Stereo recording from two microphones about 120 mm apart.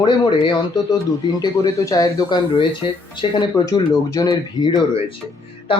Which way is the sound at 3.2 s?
50° left (ahead or behind).